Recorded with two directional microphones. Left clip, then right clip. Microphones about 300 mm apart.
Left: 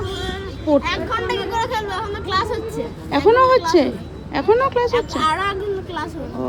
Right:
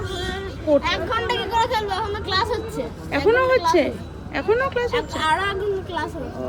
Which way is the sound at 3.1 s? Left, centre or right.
Centre.